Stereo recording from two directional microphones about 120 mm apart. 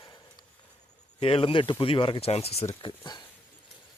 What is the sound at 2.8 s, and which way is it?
Speech, 40° left (ahead or behind).